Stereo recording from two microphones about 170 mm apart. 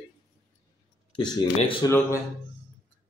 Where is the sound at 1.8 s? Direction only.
15° left (ahead or behind).